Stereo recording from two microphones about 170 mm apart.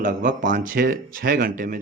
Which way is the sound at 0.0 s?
50° right (ahead or behind).